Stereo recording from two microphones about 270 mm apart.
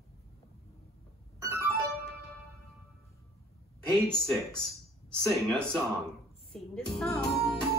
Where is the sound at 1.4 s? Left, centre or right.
Centre.